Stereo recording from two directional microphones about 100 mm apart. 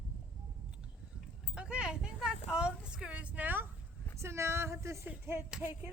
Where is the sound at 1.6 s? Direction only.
10° right (ahead or behind).